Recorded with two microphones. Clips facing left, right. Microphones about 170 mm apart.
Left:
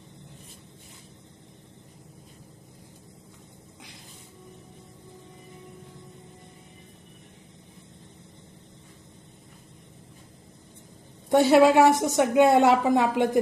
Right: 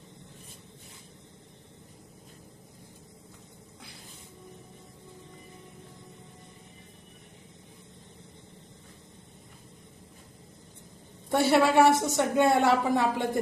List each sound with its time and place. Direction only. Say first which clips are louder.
11.3 s a woman's voice: left 6 dB; 15° left (ahead or behind)